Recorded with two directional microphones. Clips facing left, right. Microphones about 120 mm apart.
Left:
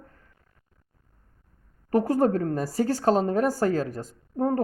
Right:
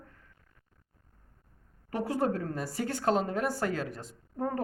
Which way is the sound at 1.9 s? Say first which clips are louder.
Left 8 dB; 45° left (ahead or behind).